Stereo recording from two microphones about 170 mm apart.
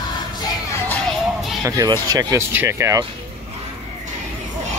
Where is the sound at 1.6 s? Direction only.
20° right (ahead or behind).